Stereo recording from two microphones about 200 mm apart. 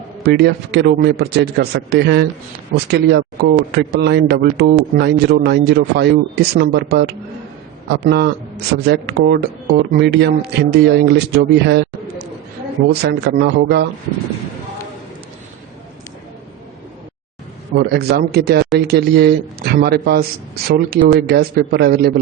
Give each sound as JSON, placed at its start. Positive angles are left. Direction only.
{"t": 0.2, "sound": "speech", "side_deg": -55}
{"t": 12.9, "sound": "speech", "side_deg": -55}
{"t": 17.7, "sound": "a man's voice", "side_deg": -50}